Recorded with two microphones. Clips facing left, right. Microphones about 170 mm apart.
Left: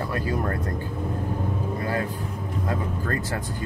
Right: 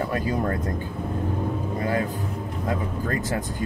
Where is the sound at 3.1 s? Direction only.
15° right (ahead or behind).